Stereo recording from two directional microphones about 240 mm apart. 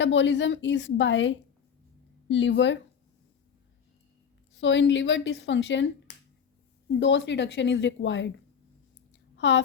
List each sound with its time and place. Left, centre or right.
0.0 s speech: left
4.5 s speech: left
9.4 s a woman's voice: left